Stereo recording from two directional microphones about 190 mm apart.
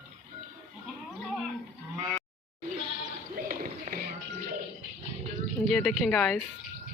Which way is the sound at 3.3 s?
50° right (ahead or behind).